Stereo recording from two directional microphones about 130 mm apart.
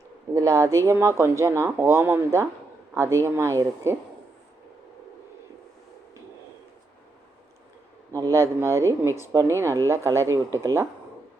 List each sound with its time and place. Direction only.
0.3 s speech: 25° right (ahead or behind)
8.1 s speech: 20° right (ahead or behind)